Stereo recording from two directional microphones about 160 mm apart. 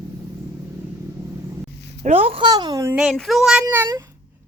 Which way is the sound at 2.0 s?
35° right (ahead or behind).